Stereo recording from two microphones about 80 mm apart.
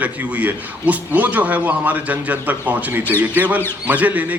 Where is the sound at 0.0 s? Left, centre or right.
Centre.